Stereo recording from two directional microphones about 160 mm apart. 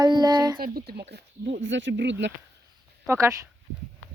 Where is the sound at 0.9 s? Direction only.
90° right.